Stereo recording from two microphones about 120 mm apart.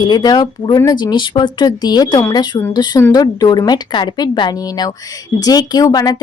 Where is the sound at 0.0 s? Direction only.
35° left (ahead or behind).